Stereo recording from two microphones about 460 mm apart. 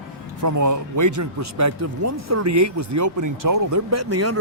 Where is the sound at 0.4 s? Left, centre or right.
Right.